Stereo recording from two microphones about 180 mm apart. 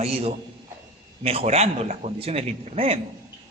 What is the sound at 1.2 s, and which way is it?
A man's voice, 35° right (ahead or behind).